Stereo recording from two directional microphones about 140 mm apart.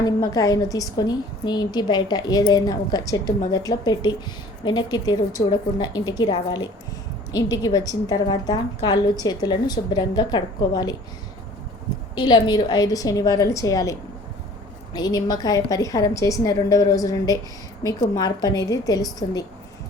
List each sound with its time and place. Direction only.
0.0 s a woman's voice: 25° left (ahead or behind)
12.2 s a woman's voice: 30° left (ahead or behind)
14.9 s a woman's voice: 30° left (ahead or behind)